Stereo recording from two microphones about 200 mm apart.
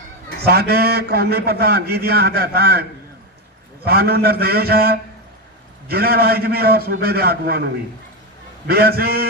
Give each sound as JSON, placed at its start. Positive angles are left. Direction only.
{"t": 0.3, "sound": "a man's voice", "side_deg": -55}
{"t": 3.8, "sound": "a man's voice", "side_deg": -50}